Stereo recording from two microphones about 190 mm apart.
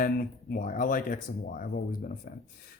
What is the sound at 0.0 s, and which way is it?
Speech, 50° left (ahead or behind).